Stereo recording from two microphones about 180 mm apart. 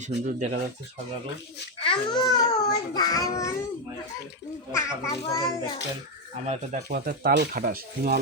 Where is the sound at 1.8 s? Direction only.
30° left (ahead or behind).